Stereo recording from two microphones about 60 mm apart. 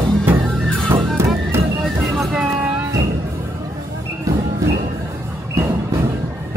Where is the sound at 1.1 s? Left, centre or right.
Right.